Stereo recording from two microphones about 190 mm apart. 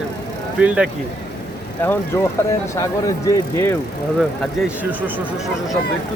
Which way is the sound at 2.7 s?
15° left (ahead or behind).